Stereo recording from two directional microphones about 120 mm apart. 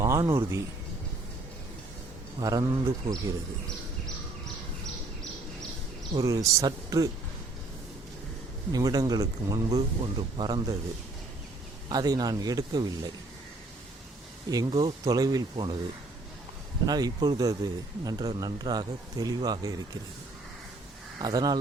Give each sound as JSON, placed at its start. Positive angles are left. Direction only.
{"t": 0.0, "sound": "a man's voice", "side_deg": -25}
{"t": 2.4, "sound": "speech", "side_deg": -30}
{"t": 6.1, "sound": "speech", "side_deg": -30}
{"t": 8.7, "sound": "speech", "side_deg": -30}
{"t": 10.0, "sound": "speech", "side_deg": -40}
{"t": 11.9, "sound": "speech", "side_deg": -35}
{"t": 14.5, "sound": "speech", "side_deg": -35}
{"t": 16.8, "sound": "speech", "side_deg": -35}
{"t": 21.2, "sound": "speech", "side_deg": -35}